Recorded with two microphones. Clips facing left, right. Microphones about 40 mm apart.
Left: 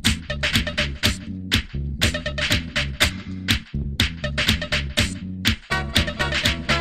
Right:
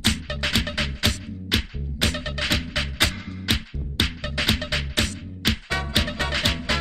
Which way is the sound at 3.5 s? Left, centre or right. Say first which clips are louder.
Left 2 dB; centre.